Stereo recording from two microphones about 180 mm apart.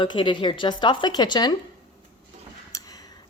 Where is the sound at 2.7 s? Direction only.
20° left (ahead or behind).